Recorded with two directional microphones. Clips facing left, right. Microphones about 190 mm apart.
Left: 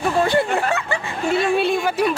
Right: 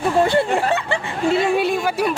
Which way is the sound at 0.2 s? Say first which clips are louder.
Right 2 dB; 25° right (ahead or behind).